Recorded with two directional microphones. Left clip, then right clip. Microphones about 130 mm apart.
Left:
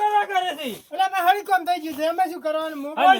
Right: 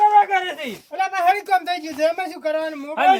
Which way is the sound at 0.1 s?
25° right (ahead or behind).